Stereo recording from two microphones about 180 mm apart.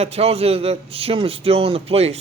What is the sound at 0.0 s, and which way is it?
A man's voice, 35° right (ahead or behind).